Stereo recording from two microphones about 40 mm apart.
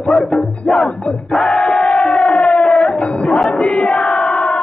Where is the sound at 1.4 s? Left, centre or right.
Left.